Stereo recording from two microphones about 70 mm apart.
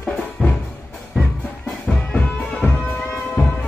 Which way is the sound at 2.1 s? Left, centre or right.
Centre.